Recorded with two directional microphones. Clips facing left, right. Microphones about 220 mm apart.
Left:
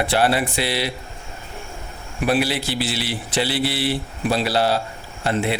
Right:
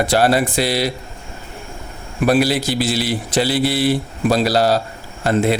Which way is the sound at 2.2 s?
40° right (ahead or behind).